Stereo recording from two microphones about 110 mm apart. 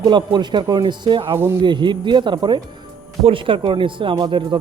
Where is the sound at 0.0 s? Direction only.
40° right (ahead or behind).